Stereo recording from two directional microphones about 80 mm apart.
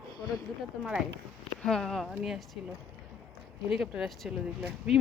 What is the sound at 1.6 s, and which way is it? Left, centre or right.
Speech, centre.